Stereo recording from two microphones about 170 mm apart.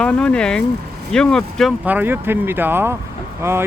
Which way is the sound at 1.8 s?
10° right (ahead or behind).